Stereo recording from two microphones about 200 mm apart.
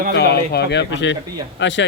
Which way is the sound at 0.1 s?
55° left (ahead or behind).